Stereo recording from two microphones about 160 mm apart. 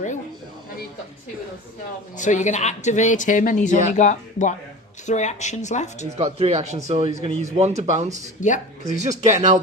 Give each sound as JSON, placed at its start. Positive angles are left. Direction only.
{"t": 2.1, "sound": "speech", "side_deg": 50}
{"t": 6.1, "sound": "speech", "side_deg": -40}
{"t": 8.4, "sound": "speech", "side_deg": 50}
{"t": 8.9, "sound": "speech", "side_deg": -50}